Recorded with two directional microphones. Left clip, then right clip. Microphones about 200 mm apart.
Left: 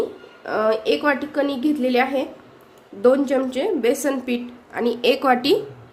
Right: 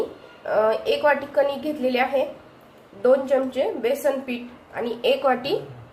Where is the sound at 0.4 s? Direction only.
45° left (ahead or behind).